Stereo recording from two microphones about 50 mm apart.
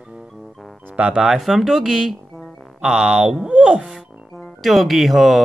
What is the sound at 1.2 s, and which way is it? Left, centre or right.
Speech, centre.